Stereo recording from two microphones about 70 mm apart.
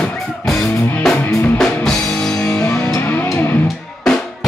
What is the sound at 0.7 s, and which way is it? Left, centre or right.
Music, left.